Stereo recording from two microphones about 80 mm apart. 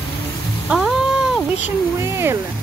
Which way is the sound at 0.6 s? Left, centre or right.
Centre.